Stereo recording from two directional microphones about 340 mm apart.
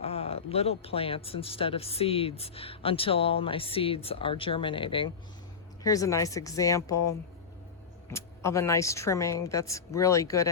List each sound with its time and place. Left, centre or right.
0.0 s speech: centre
8.1 s speech: centre